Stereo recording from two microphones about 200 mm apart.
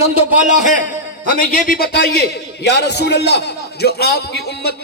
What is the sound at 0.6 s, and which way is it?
A man's voice, 40° left (ahead or behind).